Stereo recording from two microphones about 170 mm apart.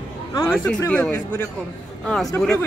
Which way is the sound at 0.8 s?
5° left (ahead or behind).